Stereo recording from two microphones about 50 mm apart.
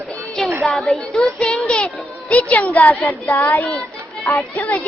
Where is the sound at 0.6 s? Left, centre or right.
Centre; by 3.5 s left.